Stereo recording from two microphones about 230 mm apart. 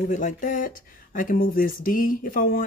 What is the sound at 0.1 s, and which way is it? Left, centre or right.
Speech, left.